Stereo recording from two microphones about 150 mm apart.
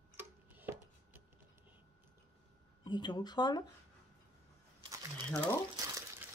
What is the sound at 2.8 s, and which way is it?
Speech, 30° left (ahead or behind).